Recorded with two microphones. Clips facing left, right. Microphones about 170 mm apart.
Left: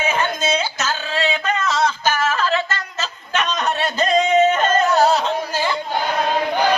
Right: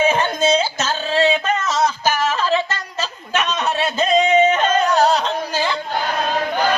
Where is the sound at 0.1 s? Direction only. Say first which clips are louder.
Right 4 dB; 30° right (ahead or behind); by 2.8 s 10° right (ahead or behind).